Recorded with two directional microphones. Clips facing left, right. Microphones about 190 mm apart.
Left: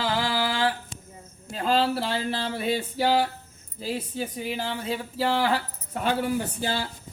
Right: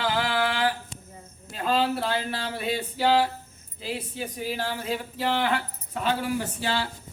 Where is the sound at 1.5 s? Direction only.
30° left (ahead or behind).